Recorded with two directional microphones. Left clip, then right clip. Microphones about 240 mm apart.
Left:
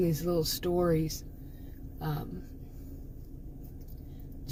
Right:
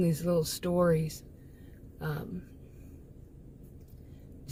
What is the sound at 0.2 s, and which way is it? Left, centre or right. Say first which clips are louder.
Speech: right 1 dB; right.